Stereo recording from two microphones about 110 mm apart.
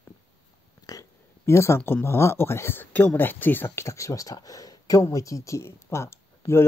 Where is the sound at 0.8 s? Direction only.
30° left (ahead or behind).